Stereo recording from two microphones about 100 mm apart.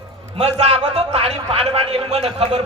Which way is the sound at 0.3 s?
90° right.